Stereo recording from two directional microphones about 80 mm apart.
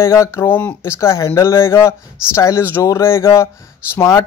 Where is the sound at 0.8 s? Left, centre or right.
Left.